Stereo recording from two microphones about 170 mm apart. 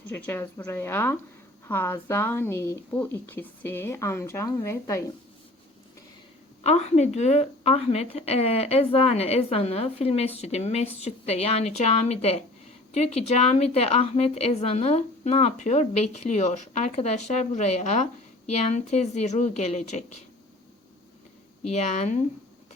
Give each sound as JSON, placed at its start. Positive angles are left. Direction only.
{"t": 0.0, "sound": "speech", "side_deg": 10}
{"t": 6.6, "sound": "a woman's voice", "side_deg": 40}
{"t": 21.7, "sound": "a woman's voice", "side_deg": 40}